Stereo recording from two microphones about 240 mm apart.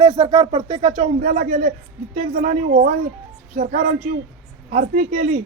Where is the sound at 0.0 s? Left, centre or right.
Centre.